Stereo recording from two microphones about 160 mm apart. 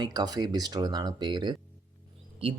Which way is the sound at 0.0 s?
25° right (ahead or behind).